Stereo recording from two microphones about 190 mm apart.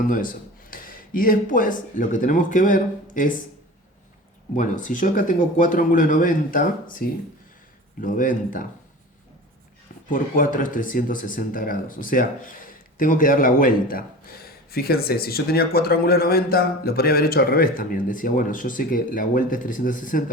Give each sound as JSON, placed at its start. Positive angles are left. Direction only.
{"t": 0.0, "sound": "speech", "side_deg": 45}
{"t": 4.5, "sound": "speech", "side_deg": 40}
{"t": 10.1, "sound": "speech", "side_deg": 45}